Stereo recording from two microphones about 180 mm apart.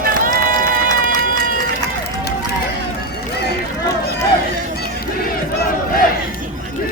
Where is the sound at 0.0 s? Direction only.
50° right (ahead or behind).